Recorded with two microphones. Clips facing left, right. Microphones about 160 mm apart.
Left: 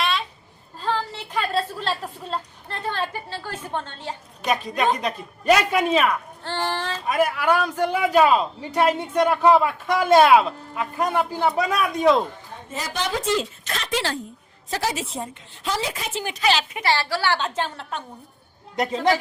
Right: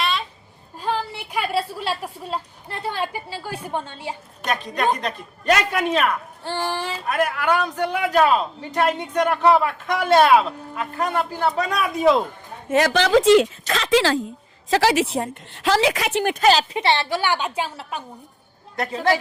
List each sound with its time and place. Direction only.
0.0 s a sound: centre (ahead or behind)
0.8 s a woman's voice: 15° right (ahead or behind)
4.4 s a man's voice: 10° left (ahead or behind)
6.4 s a woman's voice: 10° right (ahead or behind)
7.0 s a man's voice: 10° left (ahead or behind)
12.6 s a woman's voice: 75° right (ahead or behind); by 16.5 s 55° right (ahead or behind)
16.5 s a woman's voice: 35° right (ahead or behind)
16.8 s a woman's voice: 20° right (ahead or behind)